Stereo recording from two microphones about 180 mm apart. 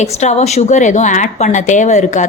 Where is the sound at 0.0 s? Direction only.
40° left (ahead or behind).